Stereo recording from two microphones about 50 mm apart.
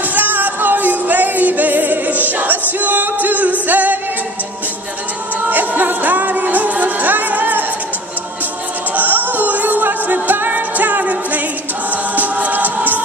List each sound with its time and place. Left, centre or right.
0.1 s music: right
5.5 s music: right
8.9 s music: right